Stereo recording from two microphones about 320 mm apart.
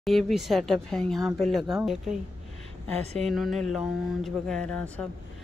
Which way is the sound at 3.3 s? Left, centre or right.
Centre.